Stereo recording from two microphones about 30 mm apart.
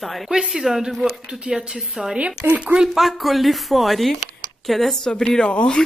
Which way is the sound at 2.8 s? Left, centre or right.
Centre.